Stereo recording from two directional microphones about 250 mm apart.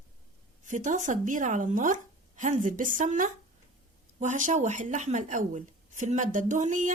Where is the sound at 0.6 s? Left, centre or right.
Right.